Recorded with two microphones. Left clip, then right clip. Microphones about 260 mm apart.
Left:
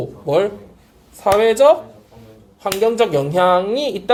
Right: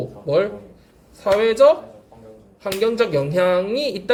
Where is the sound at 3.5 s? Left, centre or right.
Left.